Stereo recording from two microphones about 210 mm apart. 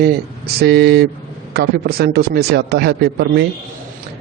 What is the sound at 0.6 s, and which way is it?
A man's voice, 50° right (ahead or behind).